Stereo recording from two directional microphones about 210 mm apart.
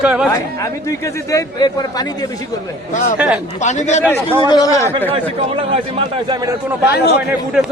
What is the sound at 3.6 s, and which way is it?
Speech, 35° left (ahead or behind).